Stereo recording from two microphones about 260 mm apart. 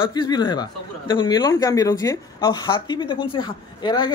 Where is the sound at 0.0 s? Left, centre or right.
Centre.